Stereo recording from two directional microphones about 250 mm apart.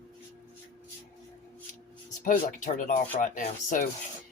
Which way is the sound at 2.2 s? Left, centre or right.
Left.